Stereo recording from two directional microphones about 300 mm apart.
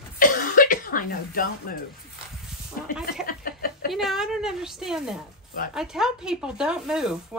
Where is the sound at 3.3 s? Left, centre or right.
Left.